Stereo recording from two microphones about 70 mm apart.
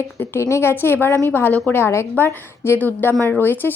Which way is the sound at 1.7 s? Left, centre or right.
Left.